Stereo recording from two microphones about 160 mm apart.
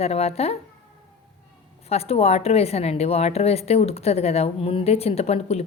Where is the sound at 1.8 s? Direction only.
40° left (ahead or behind).